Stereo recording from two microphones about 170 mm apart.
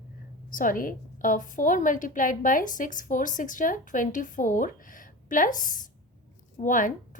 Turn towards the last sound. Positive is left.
turn(degrees=50)  # may be behind; listen again after turning